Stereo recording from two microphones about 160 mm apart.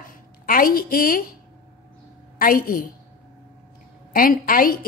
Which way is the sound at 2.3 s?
60° left (ahead or behind).